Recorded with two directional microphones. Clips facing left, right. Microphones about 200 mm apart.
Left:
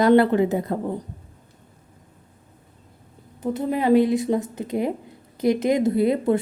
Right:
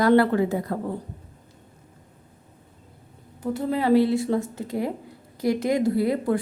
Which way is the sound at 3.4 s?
20° left (ahead or behind).